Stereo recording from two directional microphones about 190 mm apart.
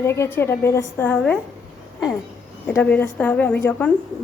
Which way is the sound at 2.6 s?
10° left (ahead or behind).